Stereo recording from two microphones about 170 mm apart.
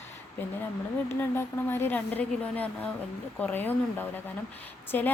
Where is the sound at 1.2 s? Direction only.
15° left (ahead or behind).